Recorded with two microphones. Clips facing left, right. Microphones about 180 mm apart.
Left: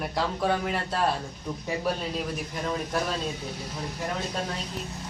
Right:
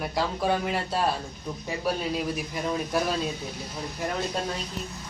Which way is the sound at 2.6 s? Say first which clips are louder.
Right 2 dB; 5° right (ahead or behind).